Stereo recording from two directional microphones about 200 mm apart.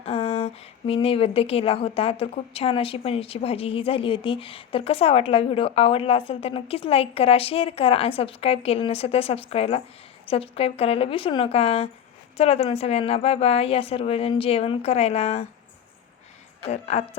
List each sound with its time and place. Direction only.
0.0 s a woman's voice: 30° left (ahead or behind)
16.6 s a woman's voice: 30° left (ahead or behind)